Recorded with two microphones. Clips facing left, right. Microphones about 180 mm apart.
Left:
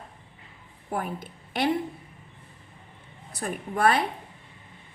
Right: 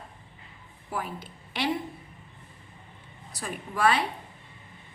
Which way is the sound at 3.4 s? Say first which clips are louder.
Left 2 dB; 55° left (ahead or behind).